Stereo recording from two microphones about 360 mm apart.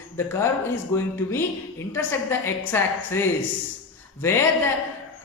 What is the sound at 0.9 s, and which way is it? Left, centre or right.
A woman's voice, centre.